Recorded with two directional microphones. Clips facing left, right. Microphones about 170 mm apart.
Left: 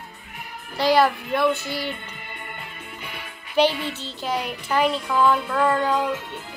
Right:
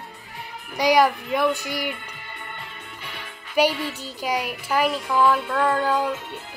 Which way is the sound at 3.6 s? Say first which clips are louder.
Left 1 dB; 10° right (ahead or behind).